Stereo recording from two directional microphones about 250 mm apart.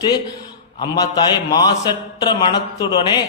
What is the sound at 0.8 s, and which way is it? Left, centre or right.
A man's voice, centre.